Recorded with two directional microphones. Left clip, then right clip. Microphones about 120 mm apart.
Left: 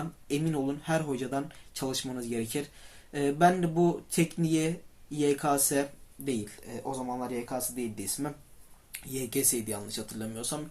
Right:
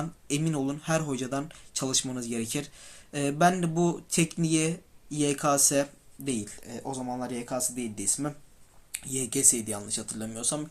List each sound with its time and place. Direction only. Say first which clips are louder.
0.3 s speech: even; 45° right (ahead or behind)